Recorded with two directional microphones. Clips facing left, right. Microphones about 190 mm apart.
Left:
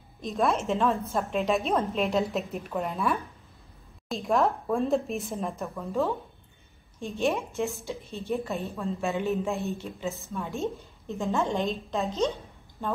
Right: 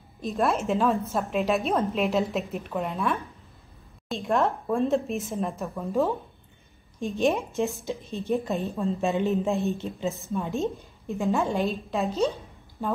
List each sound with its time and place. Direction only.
0.2 s a woman's voice: centre (ahead or behind)
5.8 s a woman's voice: 15° right (ahead or behind)